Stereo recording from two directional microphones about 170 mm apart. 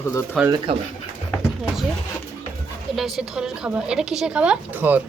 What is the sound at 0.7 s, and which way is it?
Speech, 35° right (ahead or behind).